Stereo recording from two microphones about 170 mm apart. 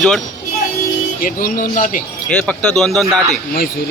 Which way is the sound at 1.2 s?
55° left (ahead or behind).